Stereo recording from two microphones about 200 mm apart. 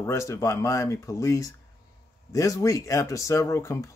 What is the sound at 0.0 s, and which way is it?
Speech, 15° left (ahead or behind).